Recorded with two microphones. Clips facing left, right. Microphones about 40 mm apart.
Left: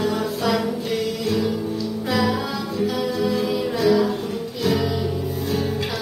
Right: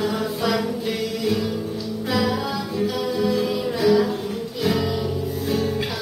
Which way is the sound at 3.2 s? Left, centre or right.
Centre.